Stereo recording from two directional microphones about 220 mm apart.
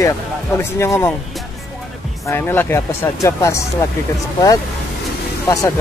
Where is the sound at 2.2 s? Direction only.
10° left (ahead or behind).